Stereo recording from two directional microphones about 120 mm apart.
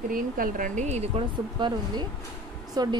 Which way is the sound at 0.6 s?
90° right.